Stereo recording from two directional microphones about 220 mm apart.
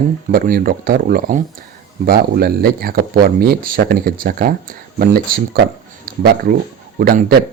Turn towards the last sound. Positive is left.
turn(degrees=-40)  # may be behind; listen again after turning